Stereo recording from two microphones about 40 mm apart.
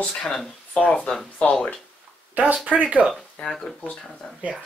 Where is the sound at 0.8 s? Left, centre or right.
Left.